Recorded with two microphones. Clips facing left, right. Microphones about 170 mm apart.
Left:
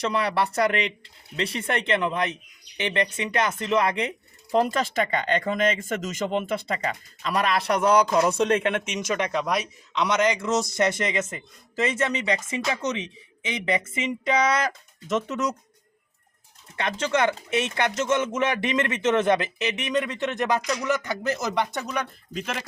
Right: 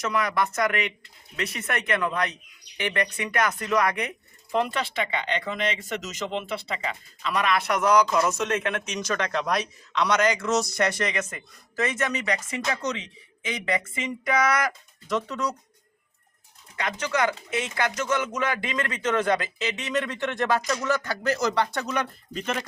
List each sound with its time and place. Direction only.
0.0 s a man's voice: 30° left (ahead or behind)
4.5 s a man's voice: 40° left (ahead or behind); by 9.3 s 20° left (ahead or behind)
9.3 s speech: 5° left (ahead or behind)
9.9 s a man's voice: 20° left (ahead or behind)
16.7 s a man's voice: 25° left (ahead or behind)
21.9 s speech: centre (ahead or behind)